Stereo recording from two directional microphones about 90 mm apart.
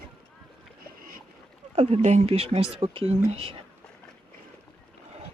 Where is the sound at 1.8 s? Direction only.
90° right.